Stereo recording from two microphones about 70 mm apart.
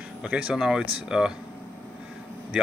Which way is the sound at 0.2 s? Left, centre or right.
Centre.